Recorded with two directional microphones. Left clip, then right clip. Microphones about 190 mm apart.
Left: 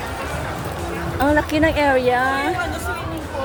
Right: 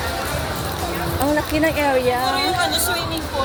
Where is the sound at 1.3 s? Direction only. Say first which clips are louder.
Left 2 dB; 25° left (ahead or behind).